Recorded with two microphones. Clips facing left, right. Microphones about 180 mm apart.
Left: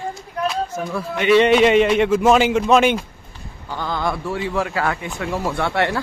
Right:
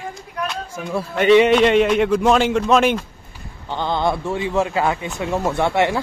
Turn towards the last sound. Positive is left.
turn(degrees=-20)  # may be behind; listen again after turning